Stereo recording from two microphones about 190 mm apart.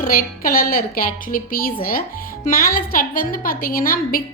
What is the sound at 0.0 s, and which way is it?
A woman's voice, 50° left (ahead or behind).